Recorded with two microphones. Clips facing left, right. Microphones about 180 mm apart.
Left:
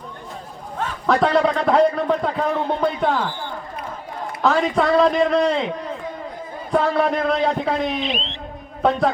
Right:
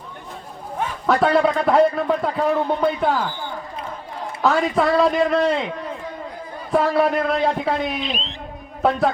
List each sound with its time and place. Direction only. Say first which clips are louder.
0.8 s a man's voice: even; 5° right (ahead or behind)
4.4 s a man's voice: even; 5° right (ahead or behind)
8.1 s a man's voice: left 2 dB; 40° right (ahead or behind)
8.8 s a man's voice: even; 5° right (ahead or behind)